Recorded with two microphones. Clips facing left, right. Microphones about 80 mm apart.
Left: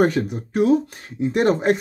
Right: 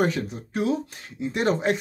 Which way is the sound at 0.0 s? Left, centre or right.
Left.